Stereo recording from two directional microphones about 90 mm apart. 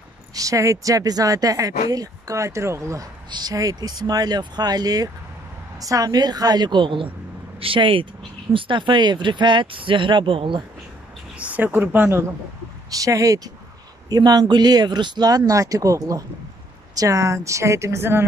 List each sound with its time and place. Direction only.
0.3 s speech: 40° right (ahead or behind)
3.3 s speech: 50° right (ahead or behind); by 7.1 s 70° right (ahead or behind)
7.6 s speech: 80° right
11.3 s a woman's voice: 15° right (ahead or behind)
12.9 s speech: 40° right (ahead or behind)